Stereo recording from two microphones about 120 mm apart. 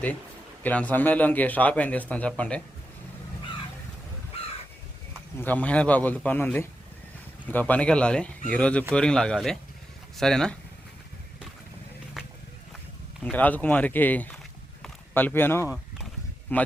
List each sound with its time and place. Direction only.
0.6 s a man's voice: 15° left (ahead or behind)
5.4 s a man's voice: 10° left (ahead or behind)
12.2 s a sound: 5° right (ahead or behind)
13.3 s a man's voice: 15° left (ahead or behind)